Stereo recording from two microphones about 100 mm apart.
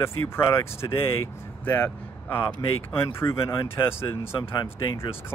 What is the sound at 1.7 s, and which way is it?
Speech, 20° left (ahead or behind).